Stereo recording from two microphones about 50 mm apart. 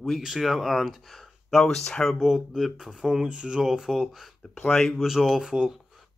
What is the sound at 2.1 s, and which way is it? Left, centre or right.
Speech, centre.